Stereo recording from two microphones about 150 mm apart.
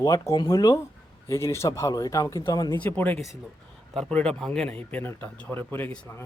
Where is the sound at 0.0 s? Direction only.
20° left (ahead or behind).